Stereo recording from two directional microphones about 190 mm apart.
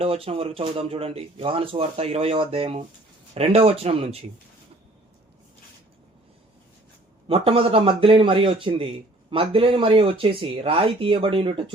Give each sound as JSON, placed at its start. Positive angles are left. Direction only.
{"t": 0.0, "sound": "speech", "side_deg": -30}
{"t": 7.3, "sound": "speech", "side_deg": -30}